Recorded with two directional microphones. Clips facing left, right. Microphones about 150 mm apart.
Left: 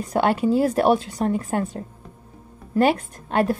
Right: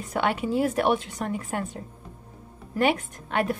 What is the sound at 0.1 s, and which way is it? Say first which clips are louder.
A woman's voice: left 6 dB; 35° left (ahead or behind).